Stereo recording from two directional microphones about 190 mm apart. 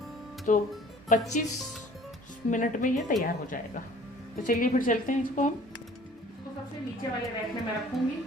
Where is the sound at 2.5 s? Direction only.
45° left (ahead or behind).